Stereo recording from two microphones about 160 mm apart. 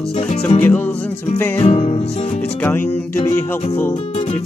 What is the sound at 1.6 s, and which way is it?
Music, 40° left (ahead or behind).